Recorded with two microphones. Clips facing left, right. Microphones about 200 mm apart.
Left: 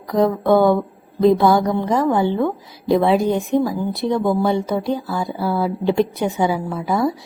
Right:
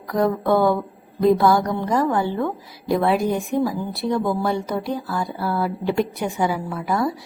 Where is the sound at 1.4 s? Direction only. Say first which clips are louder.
Left 3 dB; 20° left (ahead or behind).